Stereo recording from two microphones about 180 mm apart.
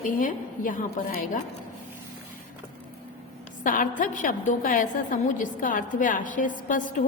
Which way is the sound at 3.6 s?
45° left (ahead or behind).